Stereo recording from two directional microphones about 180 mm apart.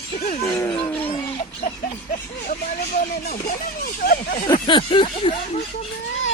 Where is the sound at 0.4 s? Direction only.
15° left (ahead or behind).